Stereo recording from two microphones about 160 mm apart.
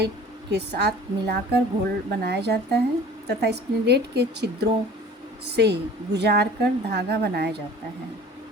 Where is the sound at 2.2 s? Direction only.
90° right.